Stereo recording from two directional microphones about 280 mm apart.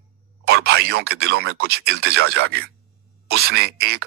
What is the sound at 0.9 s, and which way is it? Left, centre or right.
Speech, right.